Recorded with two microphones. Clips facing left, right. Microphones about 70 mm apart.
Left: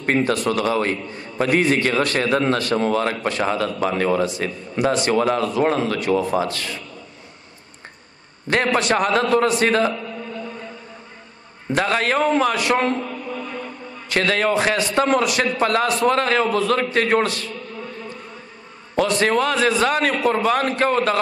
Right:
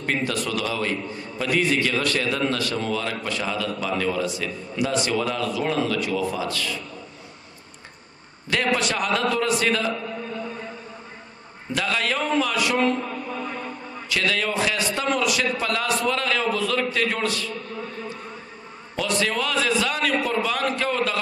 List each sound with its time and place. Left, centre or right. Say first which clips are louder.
0.0 s a man's voice: left 6 dB; left
8.7 s a man's voice: left 5 dB; left
11.7 s a man's voice: left 5 dB; left
13.3 s a sound: left 1 dB; centre
14.0 s a man's voice: left 5 dB; left
18.9 s a man's voice: left 6 dB; left